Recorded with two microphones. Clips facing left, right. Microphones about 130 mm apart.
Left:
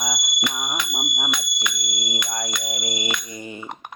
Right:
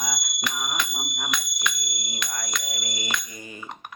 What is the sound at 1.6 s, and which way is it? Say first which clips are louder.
Music: left 1 dB; 20° left (ahead or behind).